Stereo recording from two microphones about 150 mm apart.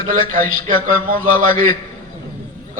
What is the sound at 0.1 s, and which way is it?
A man's voice, 65° right (ahead or behind).